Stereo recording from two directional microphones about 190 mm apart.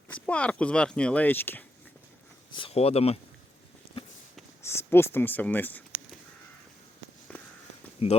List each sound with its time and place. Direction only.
0.1 s speech: 5° left (ahead or behind)
2.5 s speech: 30° left (ahead or behind)
4.6 s speech: 15° left (ahead or behind)
7.3 s a sound: 5° left (ahead or behind)
8.0 s speech: 30° left (ahead or behind)